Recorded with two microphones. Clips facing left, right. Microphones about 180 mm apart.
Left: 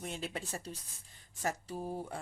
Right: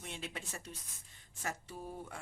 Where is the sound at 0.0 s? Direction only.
40° left (ahead or behind).